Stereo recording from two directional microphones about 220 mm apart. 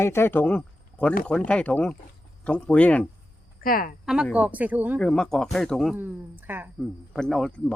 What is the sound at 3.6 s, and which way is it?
Speech, 40° left (ahead or behind).